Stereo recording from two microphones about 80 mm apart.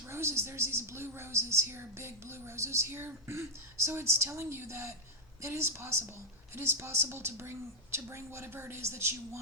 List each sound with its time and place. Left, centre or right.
0.1 s a woman's voice: right